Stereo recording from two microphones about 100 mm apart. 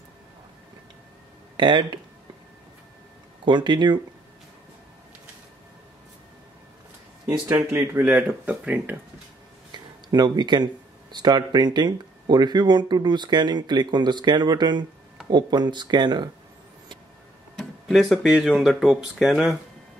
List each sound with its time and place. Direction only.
1.6 s speech: 50° right (ahead or behind)
3.4 s speech: 50° right (ahead or behind)
7.4 s speech: 25° right (ahead or behind)
10.0 s speech: 45° right (ahead or behind)
17.6 s speech: centre (ahead or behind)